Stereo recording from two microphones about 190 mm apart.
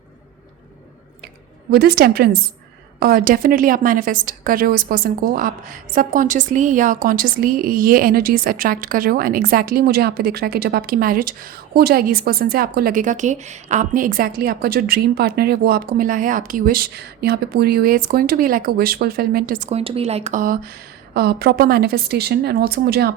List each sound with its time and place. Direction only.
1.7 s a woman's voice: 55° right (ahead or behind)
21.1 s a woman's voice: 55° right (ahead or behind)